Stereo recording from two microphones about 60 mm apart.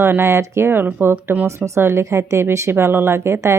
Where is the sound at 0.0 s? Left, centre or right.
Right.